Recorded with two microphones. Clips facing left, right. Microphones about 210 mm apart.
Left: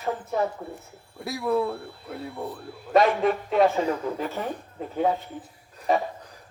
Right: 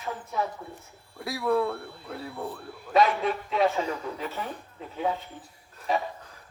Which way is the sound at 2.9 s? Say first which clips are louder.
Left 3 dB; 50° left (ahead or behind).